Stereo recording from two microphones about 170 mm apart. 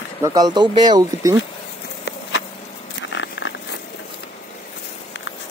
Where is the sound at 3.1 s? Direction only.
90° left.